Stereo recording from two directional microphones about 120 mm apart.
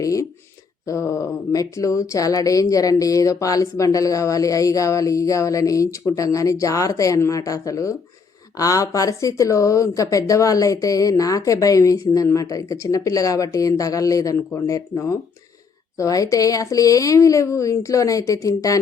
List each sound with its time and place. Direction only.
0.0 s a woman's voice: 30° left (ahead or behind)